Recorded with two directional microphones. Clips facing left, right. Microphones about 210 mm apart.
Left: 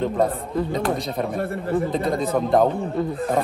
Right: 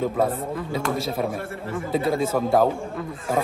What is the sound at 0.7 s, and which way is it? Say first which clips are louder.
Speech: left 1 dB; centre (ahead or behind).